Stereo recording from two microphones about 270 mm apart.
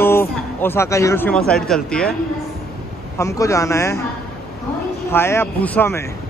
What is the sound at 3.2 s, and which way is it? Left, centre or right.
Speech, centre.